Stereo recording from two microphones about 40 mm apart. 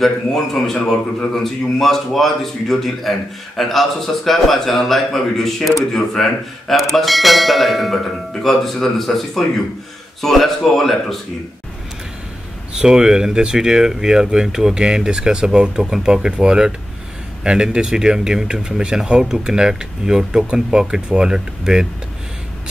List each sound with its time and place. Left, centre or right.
0.0 s a man's voice: centre
6.7 s a man's voice: centre
12.7 s speech: centre